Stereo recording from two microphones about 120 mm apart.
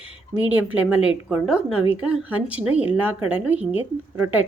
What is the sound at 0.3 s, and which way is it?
A woman's voice, 15° right (ahead or behind).